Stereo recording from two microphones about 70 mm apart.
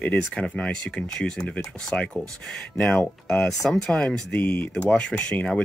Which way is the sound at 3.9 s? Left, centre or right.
Centre.